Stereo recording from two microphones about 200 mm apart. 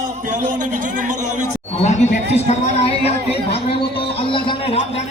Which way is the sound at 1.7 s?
30° left (ahead or behind).